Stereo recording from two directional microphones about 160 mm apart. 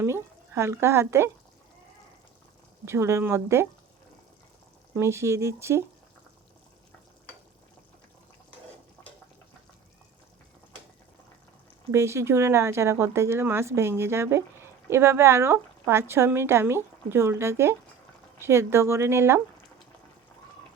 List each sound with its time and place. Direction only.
0.0 s speech: 15° right (ahead or behind)
2.8 s speech: 15° right (ahead or behind)
4.9 s speech: 15° right (ahead or behind)
11.9 s speech: 15° right (ahead or behind)